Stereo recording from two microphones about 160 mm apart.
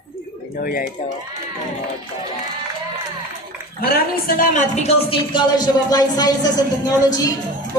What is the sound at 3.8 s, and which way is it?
Speech, 65° left (ahead or behind).